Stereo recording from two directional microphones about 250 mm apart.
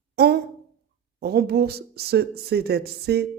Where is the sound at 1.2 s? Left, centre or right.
Right.